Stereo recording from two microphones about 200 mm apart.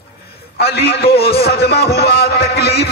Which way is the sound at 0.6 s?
55° left (ahead or behind).